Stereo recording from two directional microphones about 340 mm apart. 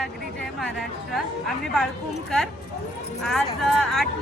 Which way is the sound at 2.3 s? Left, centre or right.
Centre.